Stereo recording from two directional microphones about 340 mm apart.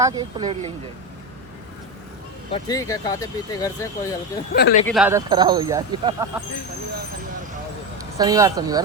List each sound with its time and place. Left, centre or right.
0.0 s speech: centre
2.5 s speech: centre
4.5 s speech: left
4.9 s speech: centre
8.2 s speech: centre